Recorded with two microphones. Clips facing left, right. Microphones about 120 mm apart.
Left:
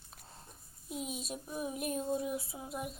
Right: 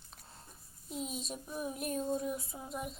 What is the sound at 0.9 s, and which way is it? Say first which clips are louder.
Child singing: even; 5° left (ahead or behind).